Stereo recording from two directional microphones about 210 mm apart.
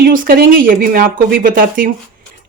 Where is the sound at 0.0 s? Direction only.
45° right (ahead or behind).